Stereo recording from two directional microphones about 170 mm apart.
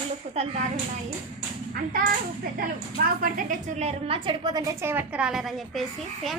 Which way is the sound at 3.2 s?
50° right (ahead or behind).